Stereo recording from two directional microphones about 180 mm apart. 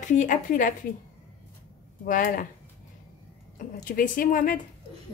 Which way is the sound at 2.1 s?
50° left (ahead or behind).